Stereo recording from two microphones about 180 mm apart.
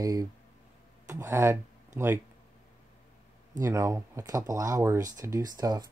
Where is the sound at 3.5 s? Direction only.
20° right (ahead or behind).